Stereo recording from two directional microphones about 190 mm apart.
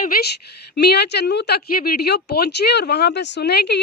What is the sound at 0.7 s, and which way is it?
Speech, 60° left (ahead or behind).